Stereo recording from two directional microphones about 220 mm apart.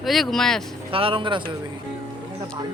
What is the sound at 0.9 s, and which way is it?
Speech, 25° right (ahead or behind).